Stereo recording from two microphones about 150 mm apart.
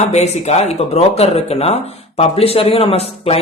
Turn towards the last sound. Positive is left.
turn(degrees=40)  # may be behind; listen again after turning